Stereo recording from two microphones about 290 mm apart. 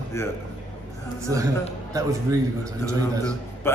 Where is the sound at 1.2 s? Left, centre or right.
Centre.